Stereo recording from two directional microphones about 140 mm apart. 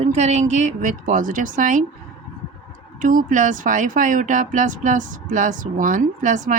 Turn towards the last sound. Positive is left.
turn(degrees=-65)  # may be behind; listen again after turning